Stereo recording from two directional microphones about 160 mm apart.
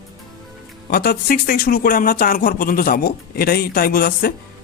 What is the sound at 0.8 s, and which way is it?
Speech, 70° left (ahead or behind).